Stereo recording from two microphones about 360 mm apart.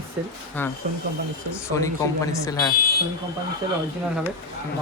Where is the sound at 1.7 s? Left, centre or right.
Centre.